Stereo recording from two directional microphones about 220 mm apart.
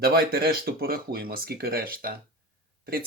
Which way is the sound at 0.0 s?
45° right (ahead or behind).